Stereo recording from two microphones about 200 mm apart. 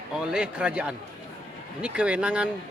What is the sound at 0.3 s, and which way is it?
A man's voice, 5° right (ahead or behind).